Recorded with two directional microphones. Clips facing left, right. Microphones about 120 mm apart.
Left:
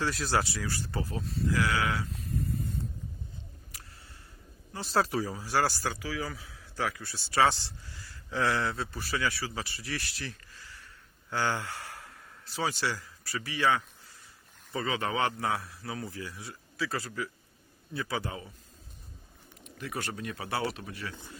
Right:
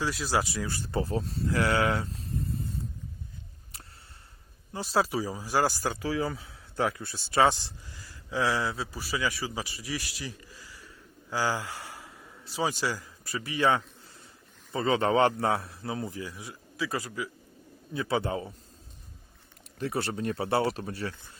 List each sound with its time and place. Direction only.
0.0 s speech: centre (ahead or behind)
0.4 s a man's voice: 20° right (ahead or behind)
4.8 s a man's voice: 5° right (ahead or behind)
5.8 s a man's voice: 30° right (ahead or behind); by 10.6 s 10° right (ahead or behind)
11.3 s a sound: 10° right (ahead or behind)
12.6 s a man's voice: 15° right (ahead or behind)
17.9 s a man's voice: 25° right (ahead or behind)
19.8 s speech: 30° right (ahead or behind)